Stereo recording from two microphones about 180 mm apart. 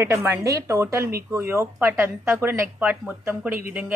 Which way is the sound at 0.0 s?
15° right (ahead or behind).